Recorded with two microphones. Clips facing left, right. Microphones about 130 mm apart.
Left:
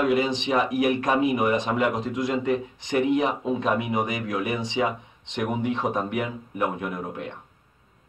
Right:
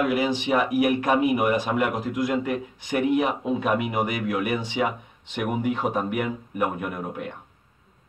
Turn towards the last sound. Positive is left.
turn(degrees=-10)  # may be behind; listen again after turning